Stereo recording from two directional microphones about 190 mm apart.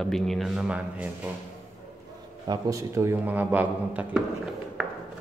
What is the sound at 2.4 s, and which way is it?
Speech, 20° right (ahead or behind).